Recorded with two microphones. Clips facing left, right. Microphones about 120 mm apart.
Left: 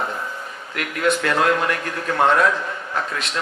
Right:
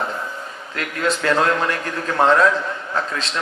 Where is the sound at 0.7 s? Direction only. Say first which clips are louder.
Left 2 dB; 30° right (ahead or behind).